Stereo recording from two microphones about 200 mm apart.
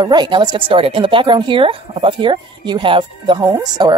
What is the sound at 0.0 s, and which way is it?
A woman's voice, 20° right (ahead or behind).